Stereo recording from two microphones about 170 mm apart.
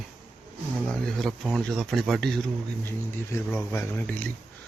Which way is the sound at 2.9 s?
15° left (ahead or behind).